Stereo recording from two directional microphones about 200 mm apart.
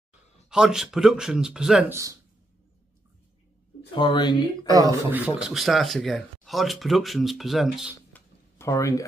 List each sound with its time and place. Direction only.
0.5 s speech: 5° right (ahead or behind)
3.9 s speech: 25° left (ahead or behind)
5.1 s speech: 5° right (ahead or behind)
8.5 s speech: 15° left (ahead or behind)